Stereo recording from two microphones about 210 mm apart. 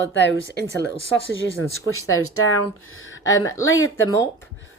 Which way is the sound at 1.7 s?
80° left.